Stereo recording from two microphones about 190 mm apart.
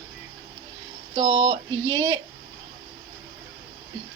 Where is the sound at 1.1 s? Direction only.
20° right (ahead or behind).